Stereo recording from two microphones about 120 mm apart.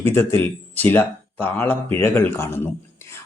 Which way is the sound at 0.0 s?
20° left (ahead or behind).